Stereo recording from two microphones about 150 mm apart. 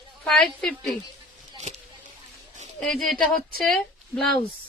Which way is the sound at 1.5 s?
50° right (ahead or behind).